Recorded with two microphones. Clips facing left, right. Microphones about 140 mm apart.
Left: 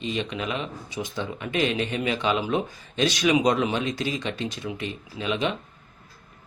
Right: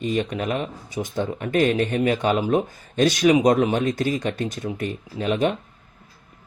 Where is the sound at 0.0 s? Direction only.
50° right (ahead or behind).